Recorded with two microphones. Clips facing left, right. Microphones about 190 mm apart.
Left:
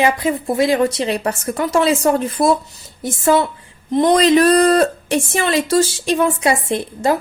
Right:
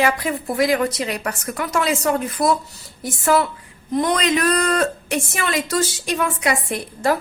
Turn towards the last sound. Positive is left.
turn(degrees=25)  # may be behind; listen again after turning